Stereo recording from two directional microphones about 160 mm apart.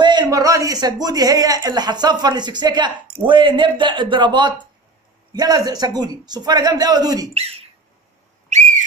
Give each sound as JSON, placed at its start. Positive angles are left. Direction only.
{"t": 0.0, "sound": "a man's voice", "side_deg": -30}
{"t": 7.3, "sound": "speech", "side_deg": -40}
{"t": 8.5, "sound": "whistle", "side_deg": -45}